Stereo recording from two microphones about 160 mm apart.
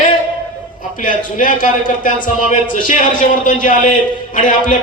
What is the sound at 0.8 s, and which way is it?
A man's voice, 55° left (ahead or behind).